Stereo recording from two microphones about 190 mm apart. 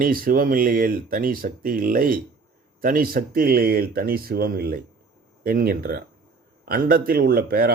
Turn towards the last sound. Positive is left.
turn(degrees=-50)  # may be behind; listen again after turning